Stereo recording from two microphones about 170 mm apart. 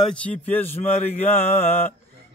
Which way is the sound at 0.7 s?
40° left (ahead or behind).